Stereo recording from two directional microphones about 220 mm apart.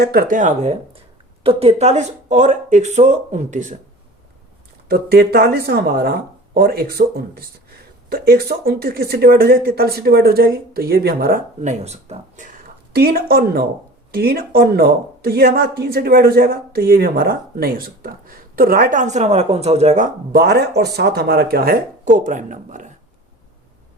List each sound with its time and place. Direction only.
0.0 s speech: 45° right (ahead or behind)
4.9 s speech: 45° right (ahead or behind)